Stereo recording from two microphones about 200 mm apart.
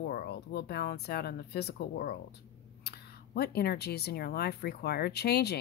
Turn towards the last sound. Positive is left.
turn(degrees=55)  # may be behind; listen again after turning